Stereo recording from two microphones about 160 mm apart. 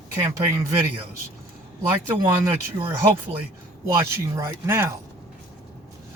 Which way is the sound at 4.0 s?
15° right (ahead or behind).